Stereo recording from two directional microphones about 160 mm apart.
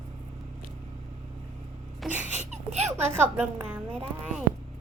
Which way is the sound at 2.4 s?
45° right (ahead or behind).